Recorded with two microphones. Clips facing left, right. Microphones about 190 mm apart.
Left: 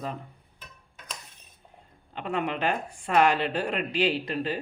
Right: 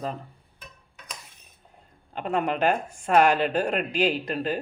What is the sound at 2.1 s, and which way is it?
Speech, 45° right (ahead or behind).